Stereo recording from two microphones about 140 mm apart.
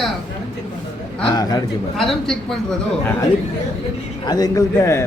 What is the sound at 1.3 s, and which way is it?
Speech, 25° left (ahead or behind).